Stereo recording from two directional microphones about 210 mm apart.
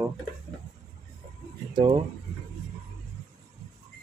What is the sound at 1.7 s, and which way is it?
Speech, 25° right (ahead or behind).